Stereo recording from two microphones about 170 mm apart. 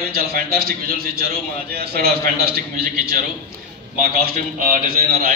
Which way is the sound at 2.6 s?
60° right (ahead or behind).